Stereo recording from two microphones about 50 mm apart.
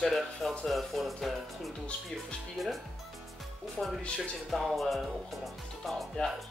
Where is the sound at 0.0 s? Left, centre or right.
Centre.